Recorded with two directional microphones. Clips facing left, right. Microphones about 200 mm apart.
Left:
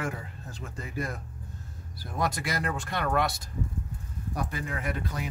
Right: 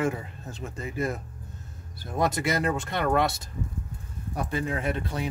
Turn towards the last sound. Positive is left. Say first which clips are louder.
# right 4 dB
turn(degrees=-30)  # may be behind; listen again after turning